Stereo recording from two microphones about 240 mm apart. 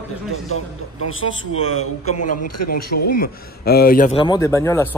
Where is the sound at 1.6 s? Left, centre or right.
Left.